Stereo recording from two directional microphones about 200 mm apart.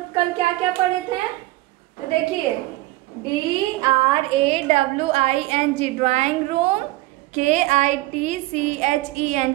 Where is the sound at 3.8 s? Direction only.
25° right (ahead or behind).